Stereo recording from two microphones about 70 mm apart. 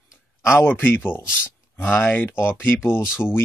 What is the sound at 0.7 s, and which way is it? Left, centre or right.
Speech, left.